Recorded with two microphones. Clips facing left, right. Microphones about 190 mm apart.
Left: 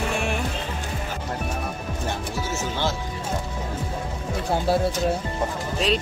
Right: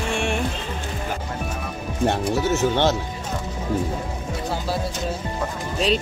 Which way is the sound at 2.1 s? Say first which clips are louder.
Right 8 dB; 65° right (ahead or behind).